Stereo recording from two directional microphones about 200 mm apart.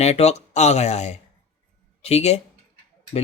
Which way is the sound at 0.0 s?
30° left (ahead or behind).